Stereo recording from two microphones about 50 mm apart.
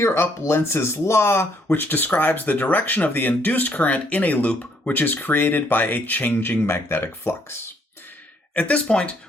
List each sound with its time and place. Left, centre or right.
0.0 s speech: left
1.6 s speech: left
8.5 s speech: left
8.9 s speech: centre